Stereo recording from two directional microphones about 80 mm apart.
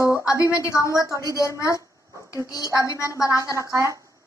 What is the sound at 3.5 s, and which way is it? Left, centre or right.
Speech, right.